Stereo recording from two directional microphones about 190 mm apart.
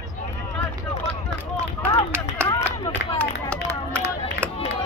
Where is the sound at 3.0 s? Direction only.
60° left (ahead or behind).